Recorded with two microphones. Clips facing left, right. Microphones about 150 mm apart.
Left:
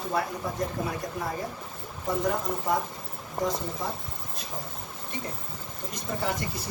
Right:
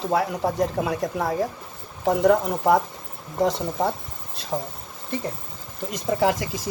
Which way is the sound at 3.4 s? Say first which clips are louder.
Right 8 dB; 80° right.